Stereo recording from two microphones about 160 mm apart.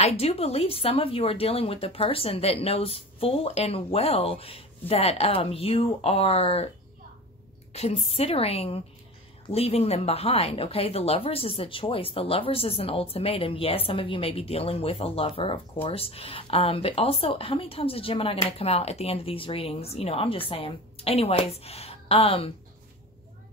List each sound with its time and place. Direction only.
0.0 s speech: 40° left (ahead or behind)
7.7 s speech: 40° left (ahead or behind)